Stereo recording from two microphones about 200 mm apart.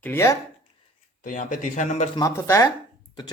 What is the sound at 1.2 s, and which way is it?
Speech, 40° left (ahead or behind).